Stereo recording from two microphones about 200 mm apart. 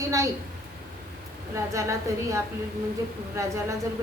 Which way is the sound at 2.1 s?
15° right (ahead or behind).